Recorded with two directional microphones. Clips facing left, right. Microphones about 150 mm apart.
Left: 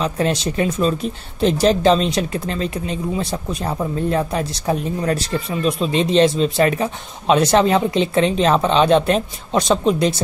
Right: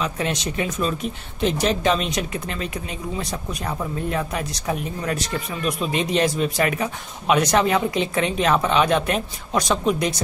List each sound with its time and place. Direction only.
0.0 s speech: 30° left (ahead or behind)